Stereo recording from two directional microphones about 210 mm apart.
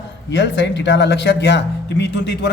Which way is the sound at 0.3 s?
60° left (ahead or behind).